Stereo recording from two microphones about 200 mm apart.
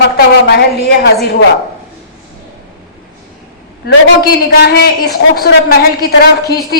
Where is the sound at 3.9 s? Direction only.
55° left (ahead or behind).